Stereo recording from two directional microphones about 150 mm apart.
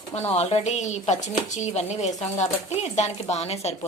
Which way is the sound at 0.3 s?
45° left (ahead or behind).